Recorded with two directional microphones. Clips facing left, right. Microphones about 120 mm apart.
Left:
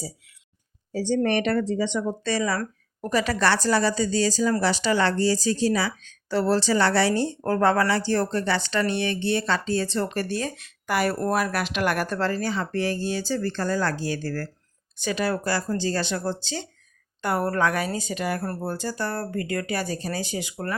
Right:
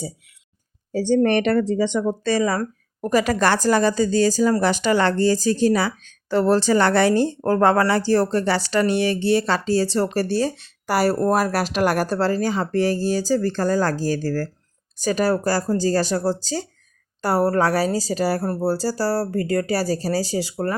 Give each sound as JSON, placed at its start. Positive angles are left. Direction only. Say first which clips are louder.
{"t": 0.9, "sound": "speech", "louder": "right 5 dB", "side_deg": -50}